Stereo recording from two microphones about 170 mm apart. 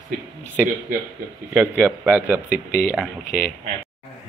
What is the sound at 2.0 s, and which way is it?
Speech, 10° right (ahead or behind).